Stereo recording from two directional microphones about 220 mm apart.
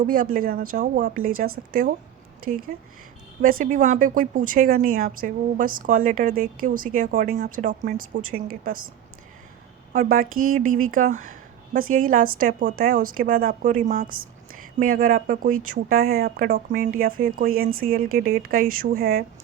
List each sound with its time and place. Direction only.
0.0 s a woman's voice: 40° right (ahead or behind)
9.9 s a woman's voice: 40° right (ahead or behind)
10.6 s speech: 70° right (ahead or behind)
10.9 s a woman's voice: 35° right (ahead or behind)